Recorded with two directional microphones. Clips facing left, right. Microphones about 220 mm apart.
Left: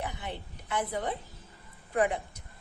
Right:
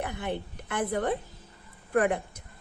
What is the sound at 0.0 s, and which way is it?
A woman's voice, 55° right (ahead or behind).